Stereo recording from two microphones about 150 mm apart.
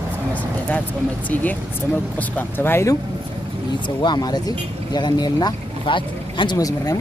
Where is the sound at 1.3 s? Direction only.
10° left (ahead or behind).